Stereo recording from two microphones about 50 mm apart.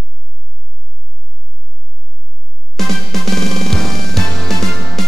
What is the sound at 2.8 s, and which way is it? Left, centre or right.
Music, centre.